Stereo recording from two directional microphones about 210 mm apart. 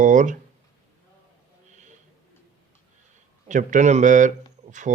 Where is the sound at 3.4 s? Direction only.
35° right (ahead or behind).